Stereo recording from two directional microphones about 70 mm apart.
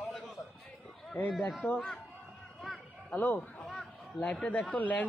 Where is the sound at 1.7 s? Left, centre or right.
Centre.